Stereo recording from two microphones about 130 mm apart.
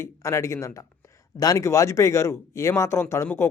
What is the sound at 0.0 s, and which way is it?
Speech, 20° left (ahead or behind).